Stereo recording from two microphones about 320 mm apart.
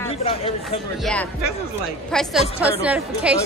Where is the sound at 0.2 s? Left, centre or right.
Centre.